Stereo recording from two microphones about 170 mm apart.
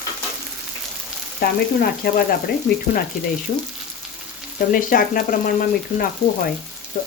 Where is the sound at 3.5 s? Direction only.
50° left (ahead or behind).